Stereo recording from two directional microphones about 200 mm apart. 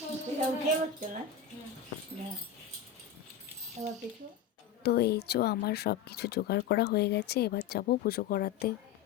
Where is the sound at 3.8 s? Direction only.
35° right (ahead or behind).